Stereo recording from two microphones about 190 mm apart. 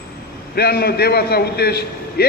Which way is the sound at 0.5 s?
55° left (ahead or behind).